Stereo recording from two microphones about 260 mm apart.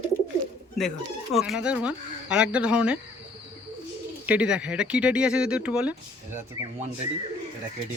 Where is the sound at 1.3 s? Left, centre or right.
Centre.